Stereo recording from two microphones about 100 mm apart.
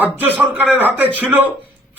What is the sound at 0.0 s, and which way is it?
Speech, 15° right (ahead or behind).